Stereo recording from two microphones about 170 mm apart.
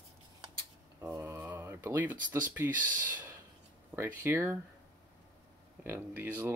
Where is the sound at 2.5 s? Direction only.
10° right (ahead or behind).